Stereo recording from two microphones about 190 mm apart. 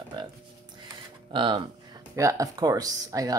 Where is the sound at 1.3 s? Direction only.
25° right (ahead or behind).